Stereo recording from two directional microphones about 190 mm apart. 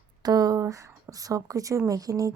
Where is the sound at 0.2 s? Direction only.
20° right (ahead or behind).